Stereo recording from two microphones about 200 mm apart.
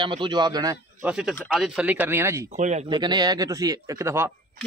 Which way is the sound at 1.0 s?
5° right (ahead or behind).